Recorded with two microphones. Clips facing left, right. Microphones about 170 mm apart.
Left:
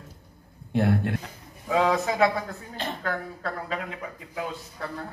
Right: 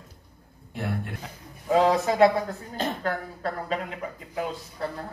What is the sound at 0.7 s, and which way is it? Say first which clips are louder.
Speech: left 8 dB; 70° left (ahead or behind).